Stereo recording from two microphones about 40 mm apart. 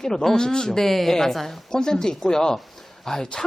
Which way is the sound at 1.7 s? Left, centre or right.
Centre.